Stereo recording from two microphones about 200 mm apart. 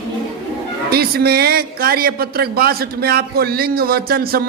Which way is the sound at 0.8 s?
50° right (ahead or behind).